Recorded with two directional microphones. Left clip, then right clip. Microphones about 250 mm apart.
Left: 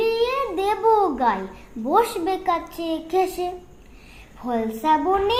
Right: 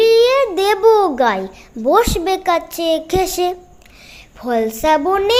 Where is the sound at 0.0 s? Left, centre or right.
Right.